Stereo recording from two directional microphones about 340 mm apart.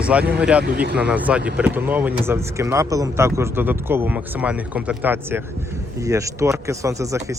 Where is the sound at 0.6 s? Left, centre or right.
Right.